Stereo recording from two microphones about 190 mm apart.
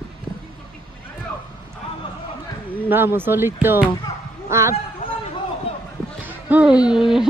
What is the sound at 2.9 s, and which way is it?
A man's voice, 10° right (ahead or behind).